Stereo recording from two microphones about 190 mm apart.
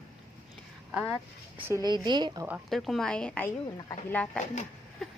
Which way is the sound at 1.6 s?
20° right (ahead or behind).